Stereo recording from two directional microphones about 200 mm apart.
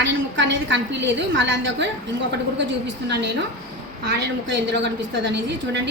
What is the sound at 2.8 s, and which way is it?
A woman's voice, 60° right (ahead or behind).